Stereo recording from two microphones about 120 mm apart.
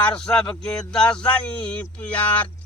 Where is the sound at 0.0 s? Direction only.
10° left (ahead or behind).